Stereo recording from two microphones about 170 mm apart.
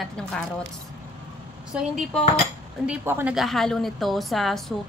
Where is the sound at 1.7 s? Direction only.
5° right (ahead or behind).